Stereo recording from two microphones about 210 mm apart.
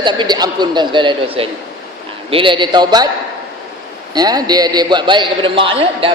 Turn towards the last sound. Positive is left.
turn(degrees=-25)  # may be behind; listen again after turning